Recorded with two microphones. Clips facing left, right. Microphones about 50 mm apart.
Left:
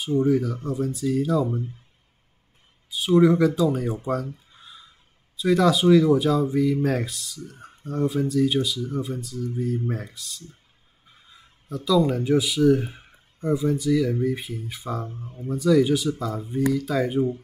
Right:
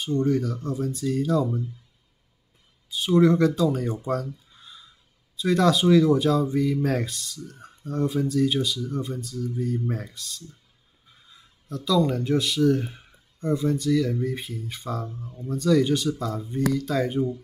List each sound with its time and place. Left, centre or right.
0.0 s speech: centre
2.9 s speech: centre
5.4 s speech: centre
11.7 s speech: centre
15.2 s speech: left
15.5 s speech: centre